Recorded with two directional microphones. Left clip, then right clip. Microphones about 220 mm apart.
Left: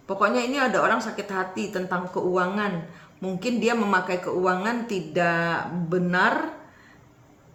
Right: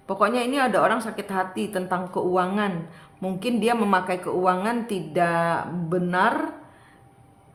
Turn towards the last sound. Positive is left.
turn(degrees=-35)  # may be behind; listen again after turning